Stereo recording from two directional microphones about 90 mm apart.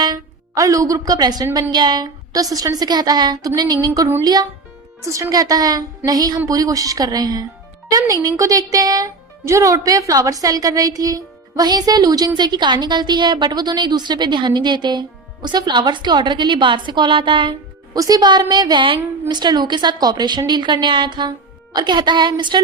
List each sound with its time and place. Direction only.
0.0 s a woman's voice: 45° right (ahead or behind)
5.0 s a woman's voice: 35° right (ahead or behind); by 17.5 s 65° right (ahead or behind)
17.9 s a woman's voice: 45° right (ahead or behind)